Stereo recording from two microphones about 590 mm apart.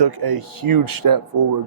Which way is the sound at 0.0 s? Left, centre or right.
Right.